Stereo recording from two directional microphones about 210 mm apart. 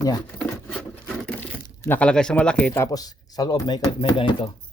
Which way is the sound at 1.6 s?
10° left (ahead or behind).